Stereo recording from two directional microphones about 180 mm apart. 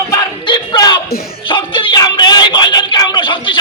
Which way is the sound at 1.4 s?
30° left (ahead or behind).